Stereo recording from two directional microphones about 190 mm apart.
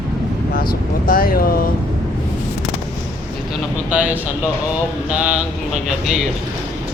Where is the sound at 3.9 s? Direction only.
5° right (ahead or behind).